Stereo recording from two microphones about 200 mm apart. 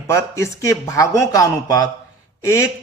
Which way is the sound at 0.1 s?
15° left (ahead or behind).